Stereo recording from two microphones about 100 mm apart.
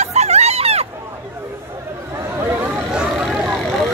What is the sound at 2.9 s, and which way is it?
Vehicle, 5° right (ahead or behind).